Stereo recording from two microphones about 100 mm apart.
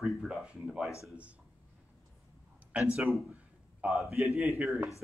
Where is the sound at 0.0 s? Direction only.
Centre (ahead or behind).